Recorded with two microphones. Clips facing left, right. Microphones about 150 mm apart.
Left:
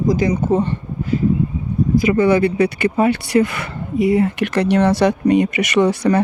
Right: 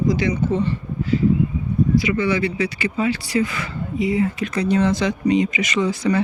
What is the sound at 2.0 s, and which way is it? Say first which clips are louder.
Speech: left 6 dB; 50° left (ahead or behind).